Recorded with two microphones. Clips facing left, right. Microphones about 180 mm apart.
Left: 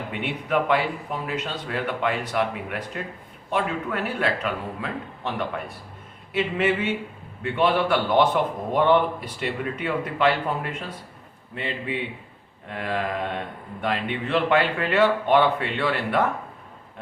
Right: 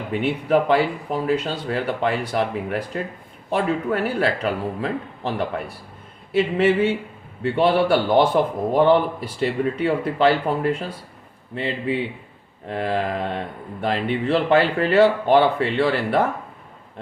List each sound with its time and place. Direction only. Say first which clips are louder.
0.1 s speech: right 7 dB; 35° right (ahead or behind)